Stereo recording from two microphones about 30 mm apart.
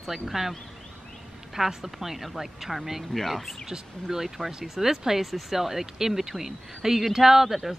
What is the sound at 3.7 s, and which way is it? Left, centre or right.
Speech, centre.